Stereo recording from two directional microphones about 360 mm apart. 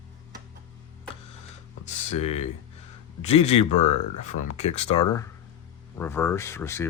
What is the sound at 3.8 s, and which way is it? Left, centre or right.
Speech, left.